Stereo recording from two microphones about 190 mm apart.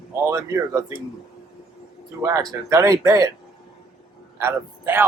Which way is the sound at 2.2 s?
15° right (ahead or behind).